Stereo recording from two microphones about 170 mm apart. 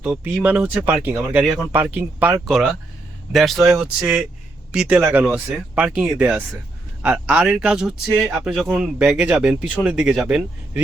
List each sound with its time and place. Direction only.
0.0 s speech: 5° right (ahead or behind)
3.3 s speech: centre (ahead or behind)